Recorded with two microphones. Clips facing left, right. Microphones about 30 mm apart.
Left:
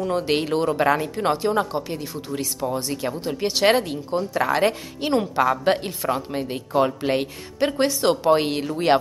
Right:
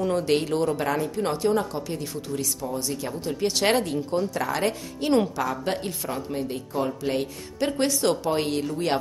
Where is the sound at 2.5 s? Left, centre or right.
Left.